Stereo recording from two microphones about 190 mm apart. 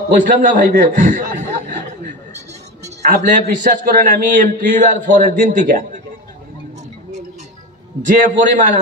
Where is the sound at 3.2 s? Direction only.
40° right (ahead or behind).